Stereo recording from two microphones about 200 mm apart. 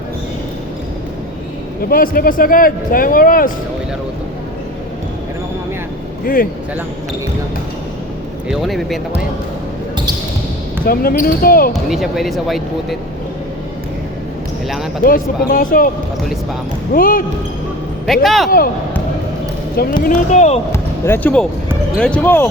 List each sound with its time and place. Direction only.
1.9 s speech: 45° left (ahead or behind)
6.2 s speech: 45° left (ahead or behind)
8.4 s speech: centre (ahead or behind)
10.8 s speech: 45° left (ahead or behind)
11.7 s speech: centre (ahead or behind)
15.0 s speech: 45° left (ahead or behind)
16.9 s speech: 45° left (ahead or behind)
18.0 s speech: centre (ahead or behind)
20.1 s speech: 35° left (ahead or behind)
20.7 s basketball bounce: 10° left (ahead or behind)
21.9 s speech: 5° left (ahead or behind)